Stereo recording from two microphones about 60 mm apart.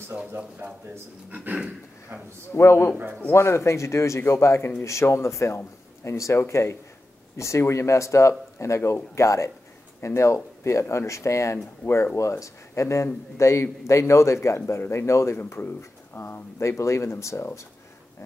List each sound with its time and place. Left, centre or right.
1.3 s dog: right
2.5 s a man's voice: left
11.8 s speech: left
12.2 s a man's voice: left
15.8 s speech: left